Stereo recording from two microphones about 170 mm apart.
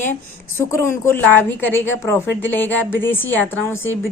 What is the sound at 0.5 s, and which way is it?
A woman's voice, 15° left (ahead or behind).